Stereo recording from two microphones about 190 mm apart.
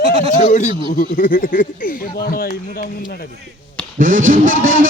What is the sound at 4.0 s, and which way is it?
Speech, 45° right (ahead or behind).